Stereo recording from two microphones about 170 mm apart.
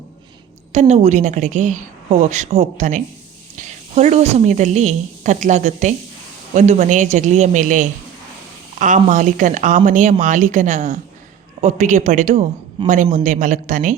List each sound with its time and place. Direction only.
0.7 s a woman's voice: 40° right (ahead or behind)